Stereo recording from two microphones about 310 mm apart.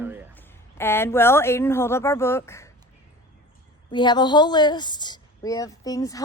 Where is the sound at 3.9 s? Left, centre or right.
Centre.